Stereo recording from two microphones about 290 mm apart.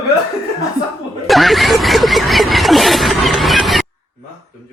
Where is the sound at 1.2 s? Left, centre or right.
Centre.